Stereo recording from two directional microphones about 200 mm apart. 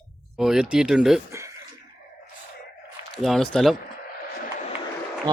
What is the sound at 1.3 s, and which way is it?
Speech, 15° right (ahead or behind).